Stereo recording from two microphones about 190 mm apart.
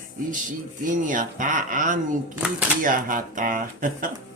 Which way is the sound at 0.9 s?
45° right (ahead or behind).